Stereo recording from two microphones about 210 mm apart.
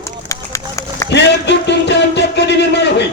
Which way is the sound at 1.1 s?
55° left (ahead or behind).